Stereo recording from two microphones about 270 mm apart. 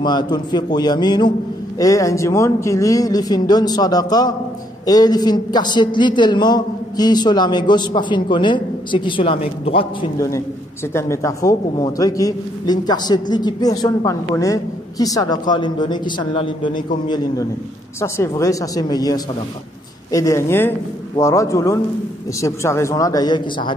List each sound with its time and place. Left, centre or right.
0.0 s a man's voice: centre
18.0 s a man's voice: centre